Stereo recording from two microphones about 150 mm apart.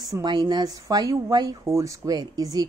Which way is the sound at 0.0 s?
25° right (ahead or behind).